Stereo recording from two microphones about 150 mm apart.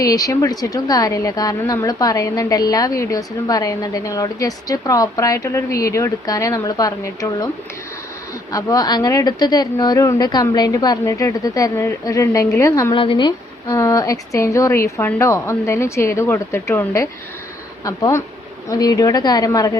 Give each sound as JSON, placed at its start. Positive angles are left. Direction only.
{"t": 0.0, "sound": "a woman's voice", "side_deg": 25}
{"t": 8.5, "sound": "a woman's voice", "side_deg": 25}
{"t": 12.9, "sound": "a woman's voice", "side_deg": 35}